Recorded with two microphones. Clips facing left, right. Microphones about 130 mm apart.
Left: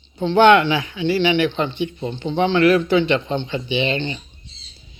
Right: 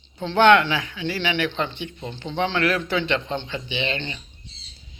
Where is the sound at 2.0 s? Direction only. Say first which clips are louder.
Left 7 dB; 30° left (ahead or behind).